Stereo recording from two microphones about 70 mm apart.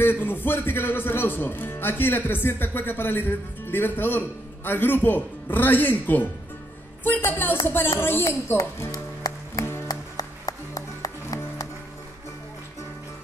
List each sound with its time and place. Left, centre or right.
0.0 s a man's voice: left
7.2 s a man's voice: left
8.9 s music: left